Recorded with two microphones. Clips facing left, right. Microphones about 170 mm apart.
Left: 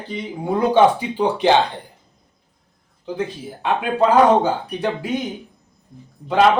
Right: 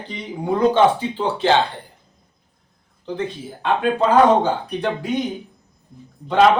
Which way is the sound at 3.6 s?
10° left (ahead or behind).